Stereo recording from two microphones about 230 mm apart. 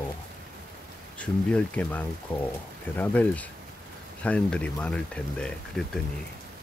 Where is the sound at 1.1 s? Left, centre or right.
Centre.